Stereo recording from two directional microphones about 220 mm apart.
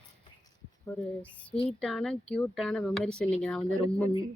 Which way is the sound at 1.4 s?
5° left (ahead or behind).